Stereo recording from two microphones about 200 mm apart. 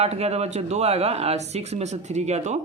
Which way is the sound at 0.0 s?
30° right (ahead or behind).